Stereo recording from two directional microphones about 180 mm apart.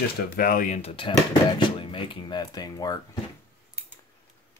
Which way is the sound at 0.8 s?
30° left (ahead or behind).